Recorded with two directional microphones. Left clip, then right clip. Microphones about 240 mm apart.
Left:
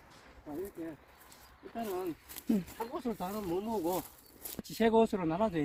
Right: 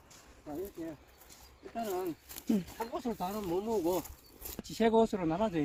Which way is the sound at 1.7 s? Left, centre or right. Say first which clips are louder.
Right 1 dB; centre.